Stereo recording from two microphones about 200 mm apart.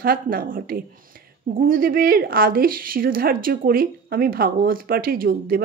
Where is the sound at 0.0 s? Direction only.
45° right (ahead or behind).